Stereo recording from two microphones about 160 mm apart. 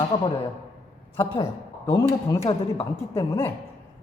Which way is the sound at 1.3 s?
25° left (ahead or behind).